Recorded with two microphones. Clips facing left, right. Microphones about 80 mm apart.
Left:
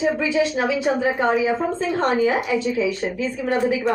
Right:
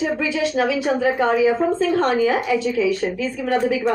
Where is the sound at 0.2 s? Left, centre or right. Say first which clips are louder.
Even; left.